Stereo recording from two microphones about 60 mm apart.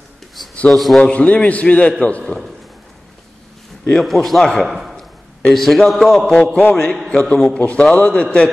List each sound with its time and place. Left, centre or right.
0.7 s a man's voice: centre
1.0 s a man's voice: left
3.9 s a man's voice: centre
6.6 s a man's voice: left
7.1 s a man's voice: centre